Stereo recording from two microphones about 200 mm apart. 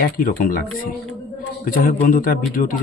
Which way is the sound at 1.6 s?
45° left (ahead or behind).